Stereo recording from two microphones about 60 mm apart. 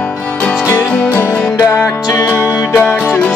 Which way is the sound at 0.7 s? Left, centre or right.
Left.